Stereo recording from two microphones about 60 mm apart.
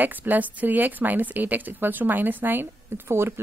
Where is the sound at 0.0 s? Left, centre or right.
Right.